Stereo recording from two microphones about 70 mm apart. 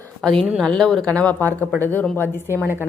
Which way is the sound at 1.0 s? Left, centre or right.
Centre.